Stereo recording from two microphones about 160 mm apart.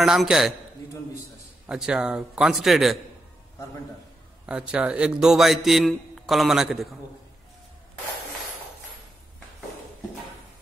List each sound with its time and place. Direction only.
0.0 s a man's voice: centre (ahead or behind)
1.7 s a man's voice: 5° right (ahead or behind)
4.5 s a man's voice: 5° right (ahead or behind)